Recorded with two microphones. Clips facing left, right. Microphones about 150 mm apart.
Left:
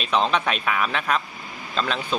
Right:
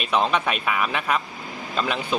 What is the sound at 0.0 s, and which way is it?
Speech, 10° right (ahead or behind).